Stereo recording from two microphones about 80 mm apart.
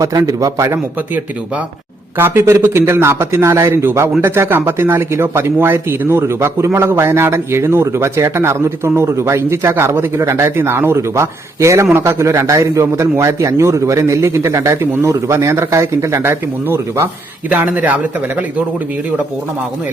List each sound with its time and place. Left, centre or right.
0.0 s a man's voice: right
2.1 s speech: right
17.5 s speech: centre